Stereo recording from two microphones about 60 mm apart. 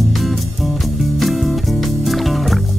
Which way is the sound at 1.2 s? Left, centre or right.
Centre.